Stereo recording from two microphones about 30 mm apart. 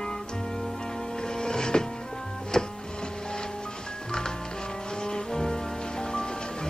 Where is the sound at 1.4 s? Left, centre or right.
Left.